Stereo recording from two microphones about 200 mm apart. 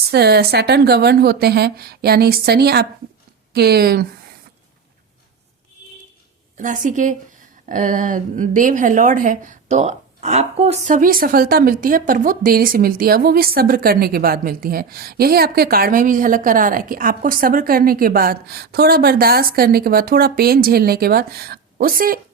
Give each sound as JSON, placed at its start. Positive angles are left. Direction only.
{"t": 0.1, "sound": "speech", "side_deg": -55}
{"t": 6.6, "sound": "a woman's voice", "side_deg": -40}